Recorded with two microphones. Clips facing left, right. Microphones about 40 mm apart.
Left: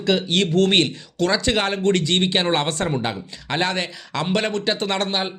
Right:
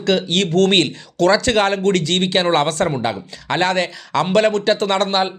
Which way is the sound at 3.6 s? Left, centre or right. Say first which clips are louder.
Right 5 dB; right.